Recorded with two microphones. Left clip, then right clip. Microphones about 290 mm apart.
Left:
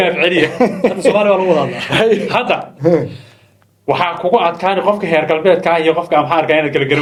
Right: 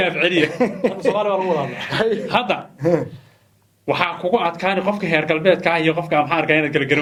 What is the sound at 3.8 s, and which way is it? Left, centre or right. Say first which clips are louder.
Speech: left 5 dB; right.